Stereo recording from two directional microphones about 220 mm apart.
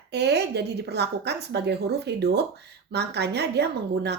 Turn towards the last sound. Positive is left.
turn(degrees=-50)  # may be behind; listen again after turning